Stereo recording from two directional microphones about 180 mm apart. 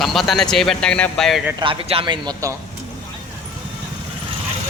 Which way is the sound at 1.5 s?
25° right (ahead or behind).